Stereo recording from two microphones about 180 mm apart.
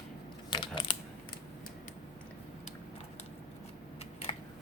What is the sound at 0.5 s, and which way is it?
Crushing, 25° left (ahead or behind).